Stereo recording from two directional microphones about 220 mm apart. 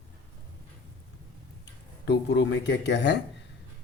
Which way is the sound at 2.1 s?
50° left (ahead or behind).